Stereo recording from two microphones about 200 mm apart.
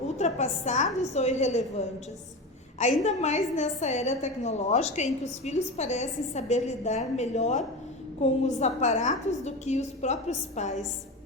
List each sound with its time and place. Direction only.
0.2 s a woman's voice: 35° left (ahead or behind)
3.0 s a woman's voice: 35° left (ahead or behind)